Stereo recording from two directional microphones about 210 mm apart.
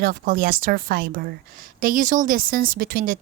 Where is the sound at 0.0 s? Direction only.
45° right (ahead or behind).